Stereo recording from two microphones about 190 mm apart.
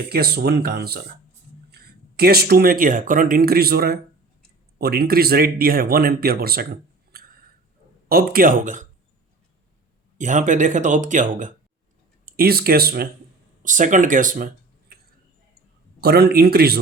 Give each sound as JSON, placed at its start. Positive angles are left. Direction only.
{"t": 0.1, "sound": "speech", "side_deg": -55}
{"t": 7.1, "sound": "a sound", "side_deg": -55}
{"t": 8.1, "sound": "speech", "side_deg": -50}
{"t": 10.2, "sound": "speech", "side_deg": -40}
{"t": 12.2, "sound": "speech", "side_deg": -55}
{"t": 13.6, "sound": "speech", "side_deg": -40}
{"t": 16.0, "sound": "speech", "side_deg": -55}